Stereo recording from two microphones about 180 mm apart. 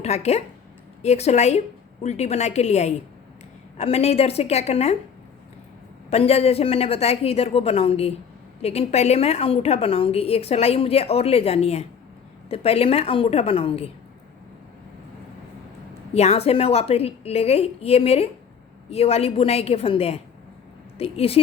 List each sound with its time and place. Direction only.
0.0 s a woman's voice: 35° left (ahead or behind)
6.1 s a woman's voice: 35° left (ahead or behind)
16.1 s a woman's voice: 35° left (ahead or behind)